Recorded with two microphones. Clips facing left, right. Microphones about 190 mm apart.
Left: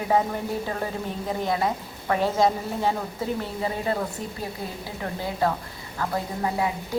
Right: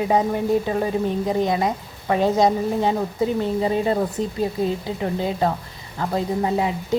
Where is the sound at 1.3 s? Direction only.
20° right (ahead or behind).